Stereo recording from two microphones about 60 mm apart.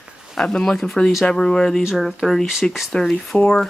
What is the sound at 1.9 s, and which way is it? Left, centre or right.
Speech, centre.